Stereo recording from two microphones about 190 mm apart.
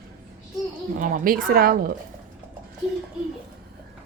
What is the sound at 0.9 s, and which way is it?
Speech, 45° right (ahead or behind).